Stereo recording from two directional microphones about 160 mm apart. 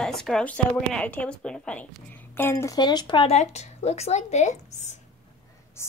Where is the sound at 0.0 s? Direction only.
5° left (ahead or behind); by 3.3 s 30° left (ahead or behind).